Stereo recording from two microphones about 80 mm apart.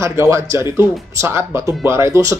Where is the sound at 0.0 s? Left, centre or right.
Right.